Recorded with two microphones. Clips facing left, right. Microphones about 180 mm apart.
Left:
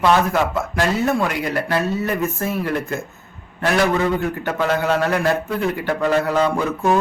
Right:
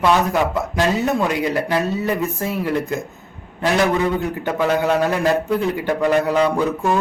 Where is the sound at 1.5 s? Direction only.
15° right (ahead or behind).